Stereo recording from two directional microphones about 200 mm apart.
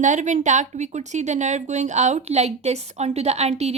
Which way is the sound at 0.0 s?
40° right (ahead or behind).